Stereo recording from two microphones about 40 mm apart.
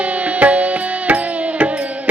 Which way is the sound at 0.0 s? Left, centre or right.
Right.